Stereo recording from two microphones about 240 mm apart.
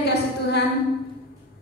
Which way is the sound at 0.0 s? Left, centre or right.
Left.